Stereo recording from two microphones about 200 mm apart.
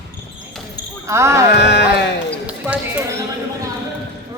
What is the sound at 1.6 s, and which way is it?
Speech, 60° left (ahead or behind).